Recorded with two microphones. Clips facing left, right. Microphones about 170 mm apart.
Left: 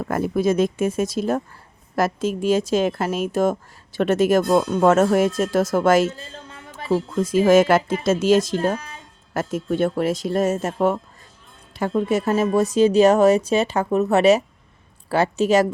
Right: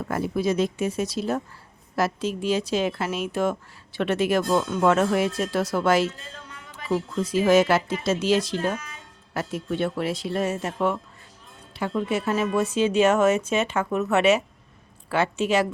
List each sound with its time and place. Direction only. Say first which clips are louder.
0.0 s a woman's voice: left 4 dB; 50° left (ahead or behind)
6.1 s music: left 4 dB; 30° left (ahead or behind)
7.2 s a woman's voice: left 4 dB; 45° left (ahead or behind)
9.3 s a woman's voice: left 5 dB; 45° left (ahead or behind)